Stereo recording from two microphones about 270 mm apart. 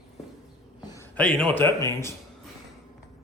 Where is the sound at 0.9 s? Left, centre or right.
Centre.